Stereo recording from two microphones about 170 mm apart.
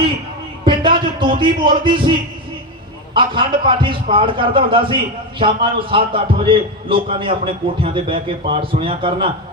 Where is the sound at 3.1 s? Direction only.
30° right (ahead or behind).